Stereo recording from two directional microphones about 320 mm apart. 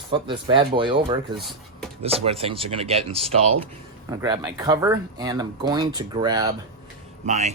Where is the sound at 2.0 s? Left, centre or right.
Centre.